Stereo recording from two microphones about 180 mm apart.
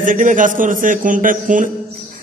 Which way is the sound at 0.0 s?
45° right (ahead or behind).